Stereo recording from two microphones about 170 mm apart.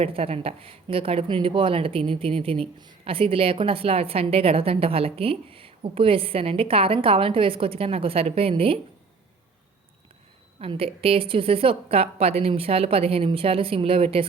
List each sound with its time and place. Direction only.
0.0 s speech: 35° right (ahead or behind)
10.6 s speech: 35° right (ahead or behind)